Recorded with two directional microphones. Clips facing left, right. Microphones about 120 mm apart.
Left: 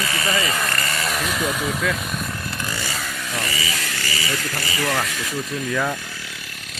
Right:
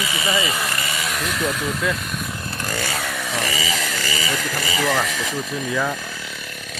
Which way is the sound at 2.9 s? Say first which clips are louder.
Right 3 dB; 70° right (ahead or behind).